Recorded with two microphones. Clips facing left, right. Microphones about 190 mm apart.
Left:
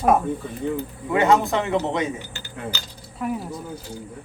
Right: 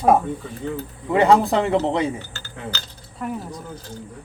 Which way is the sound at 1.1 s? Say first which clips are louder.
Right 3 dB; 35° right (ahead or behind).